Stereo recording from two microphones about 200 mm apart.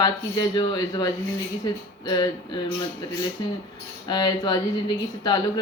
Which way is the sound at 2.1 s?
20° left (ahead or behind).